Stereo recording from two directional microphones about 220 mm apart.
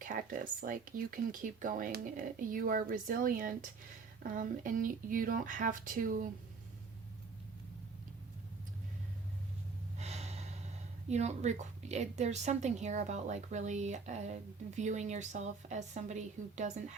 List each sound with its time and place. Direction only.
0.0 s a woman's voice: 35° right (ahead or behind)
10.0 s gasp: 30° right (ahead or behind)
11.1 s a woman's voice: 30° right (ahead or behind)